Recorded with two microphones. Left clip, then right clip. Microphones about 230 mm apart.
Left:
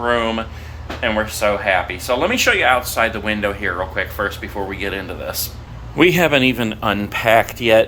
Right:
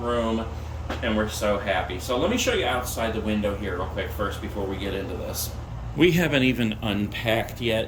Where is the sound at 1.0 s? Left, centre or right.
Centre.